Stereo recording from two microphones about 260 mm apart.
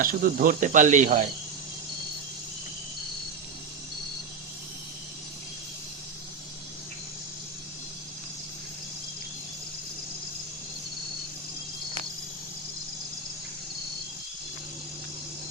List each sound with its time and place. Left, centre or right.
0.0 s speech: right